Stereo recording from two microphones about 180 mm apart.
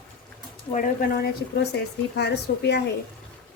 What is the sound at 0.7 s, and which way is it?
Speech, 45° left (ahead or behind).